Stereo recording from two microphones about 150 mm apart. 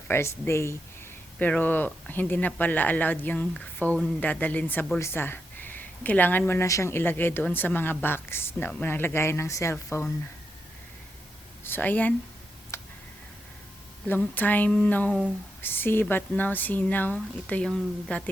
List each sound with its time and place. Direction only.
0.1 s speech: 15° left (ahead or behind)
11.6 s speech: 15° left (ahead or behind)
12.7 s tick: 20° left (ahead or behind)
14.1 s speech: 10° left (ahead or behind)